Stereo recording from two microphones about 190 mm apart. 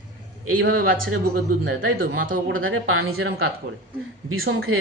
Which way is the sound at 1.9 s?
50° right (ahead or behind).